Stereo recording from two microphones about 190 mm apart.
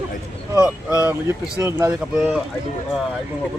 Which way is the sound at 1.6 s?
15° right (ahead or behind).